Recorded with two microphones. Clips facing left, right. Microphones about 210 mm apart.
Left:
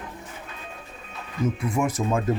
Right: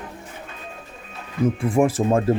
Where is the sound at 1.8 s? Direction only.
30° right (ahead or behind).